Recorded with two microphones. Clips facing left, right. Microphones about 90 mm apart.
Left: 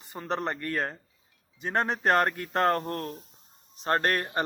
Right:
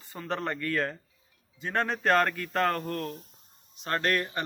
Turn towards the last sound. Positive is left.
turn(degrees=40)  # may be behind; listen again after turning